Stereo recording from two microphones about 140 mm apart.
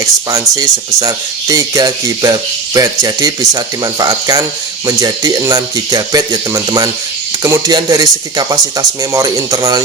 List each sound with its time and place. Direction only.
0.3 s speech: 25° right (ahead or behind)